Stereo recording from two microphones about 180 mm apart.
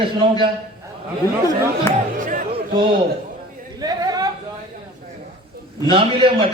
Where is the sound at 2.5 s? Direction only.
30° right (ahead or behind).